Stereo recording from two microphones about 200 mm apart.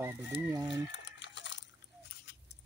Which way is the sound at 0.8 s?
65° left (ahead or behind).